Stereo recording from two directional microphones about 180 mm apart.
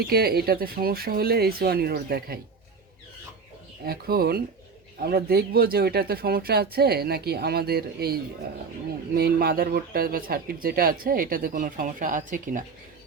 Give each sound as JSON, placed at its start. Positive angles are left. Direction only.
{"t": 0.0, "sound": "speech", "side_deg": -60}
{"t": 3.8, "sound": "speech", "side_deg": -60}